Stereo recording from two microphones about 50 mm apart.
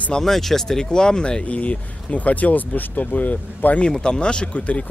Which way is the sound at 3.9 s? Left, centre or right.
Centre.